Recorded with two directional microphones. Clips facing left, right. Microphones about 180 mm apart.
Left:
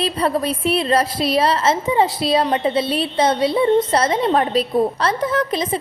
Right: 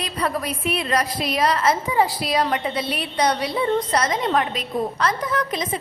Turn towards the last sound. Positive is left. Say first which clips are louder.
# left 4 dB
turn(degrees=30)  # may be behind; listen again after turning